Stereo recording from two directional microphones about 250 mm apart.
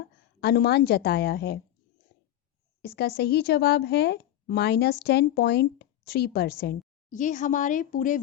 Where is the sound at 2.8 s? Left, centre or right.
Left.